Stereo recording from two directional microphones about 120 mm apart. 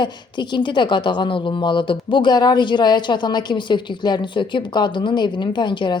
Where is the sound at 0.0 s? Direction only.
40° left (ahead or behind).